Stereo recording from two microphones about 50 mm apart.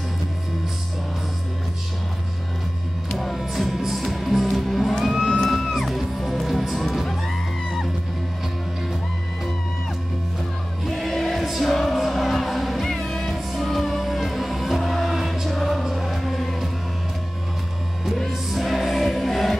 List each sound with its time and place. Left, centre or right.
3.2 s music: centre
10.9 s music: centre
18.1 s music: centre